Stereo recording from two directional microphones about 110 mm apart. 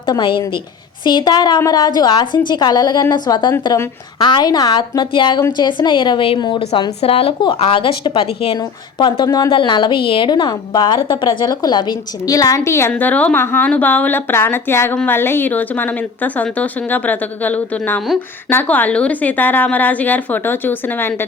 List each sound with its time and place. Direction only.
0.0 s a woman's voice: 50° left (ahead or behind)
7.0 s a woman's voice: 60° left (ahead or behind)
8.5 s a woman's voice: 45° left (ahead or behind)
9.5 s a woman's voice: 45° left (ahead or behind); by 12.9 s 25° left (ahead or behind)
12.9 s a woman's voice: 15° left (ahead or behind)